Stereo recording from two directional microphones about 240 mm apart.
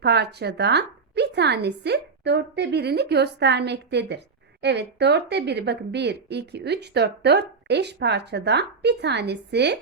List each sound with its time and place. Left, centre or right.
0.0 s speech: right